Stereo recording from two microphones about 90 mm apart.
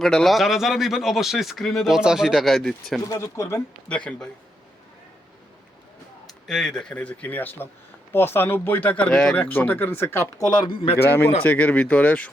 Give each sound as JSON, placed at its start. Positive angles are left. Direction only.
{"t": 0.0, "sound": "speech", "side_deg": 5}
{"t": 3.1, "sound": "speech", "side_deg": 35}
{"t": 3.8, "sound": "a man's voice", "side_deg": 10}
{"t": 6.5, "sound": "a man's voice", "side_deg": 5}
{"t": 10.3, "sound": "speech", "side_deg": 45}
{"t": 10.7, "sound": "a man's voice", "side_deg": 75}
{"t": 10.9, "sound": "a man's voice", "side_deg": 25}